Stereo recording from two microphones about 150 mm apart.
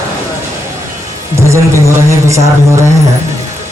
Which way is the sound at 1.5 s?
20° right (ahead or behind).